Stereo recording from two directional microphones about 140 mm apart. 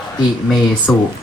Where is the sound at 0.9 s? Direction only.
5° left (ahead or behind).